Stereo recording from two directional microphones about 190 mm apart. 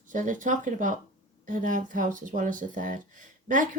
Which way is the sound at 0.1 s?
40° right (ahead or behind).